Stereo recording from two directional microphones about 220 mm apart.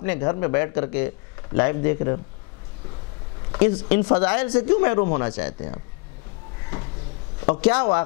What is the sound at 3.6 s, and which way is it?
Speech, 10° left (ahead or behind).